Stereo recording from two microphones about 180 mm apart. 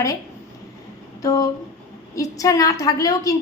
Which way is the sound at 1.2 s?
20° left (ahead or behind).